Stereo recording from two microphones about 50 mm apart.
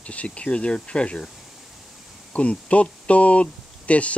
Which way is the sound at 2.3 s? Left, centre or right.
Left.